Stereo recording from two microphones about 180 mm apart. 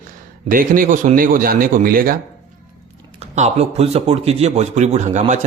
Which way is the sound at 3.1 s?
35° right (ahead or behind).